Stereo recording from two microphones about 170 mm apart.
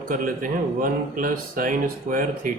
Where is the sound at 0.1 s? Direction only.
55° right (ahead or behind).